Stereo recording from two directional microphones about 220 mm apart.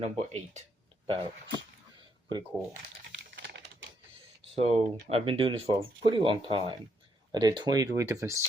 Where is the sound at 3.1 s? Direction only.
50° right (ahead or behind).